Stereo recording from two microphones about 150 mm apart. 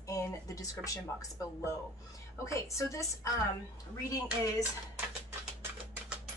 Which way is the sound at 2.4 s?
20° left (ahead or behind).